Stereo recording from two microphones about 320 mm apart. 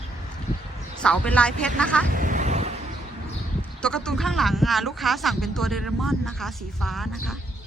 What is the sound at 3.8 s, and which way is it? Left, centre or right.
Speech, centre.